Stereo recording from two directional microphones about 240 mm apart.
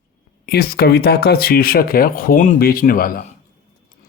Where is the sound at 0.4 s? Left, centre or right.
Left.